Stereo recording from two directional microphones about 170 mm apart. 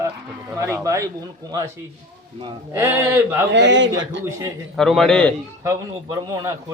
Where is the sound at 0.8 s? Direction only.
20° right (ahead or behind).